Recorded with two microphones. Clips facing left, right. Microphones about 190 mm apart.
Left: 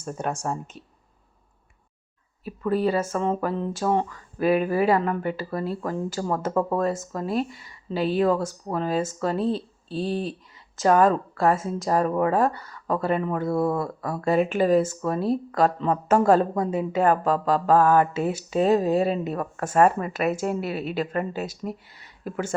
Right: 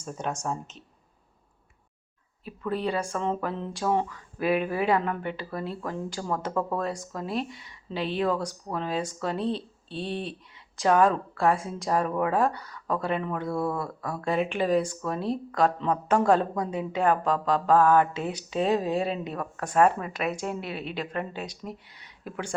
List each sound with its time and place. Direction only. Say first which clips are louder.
0.0 s speech: left 3 dB; 10° left (ahead or behind)
2.6 s speech: left 5 dB; 5° left (ahead or behind)
12.3 s speech: left 3 dB; 45° left (ahead or behind)
12.5 s speech: left 3 dB; 5° left (ahead or behind)
13.5 s speech: left 5 dB; 25° left (ahead or behind)
14.0 s speech: left 5 dB; 5° left (ahead or behind)